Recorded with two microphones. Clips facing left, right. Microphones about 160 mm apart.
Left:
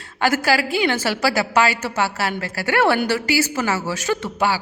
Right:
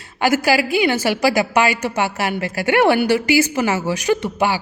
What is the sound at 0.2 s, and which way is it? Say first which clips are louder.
A woman's voice: right 2 dB; 10° right (ahead or behind).